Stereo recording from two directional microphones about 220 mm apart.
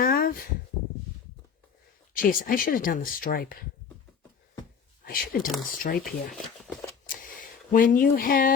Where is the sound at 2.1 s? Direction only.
40° left (ahead or behind).